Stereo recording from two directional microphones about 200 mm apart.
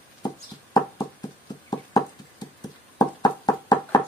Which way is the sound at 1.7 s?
20° left (ahead or behind).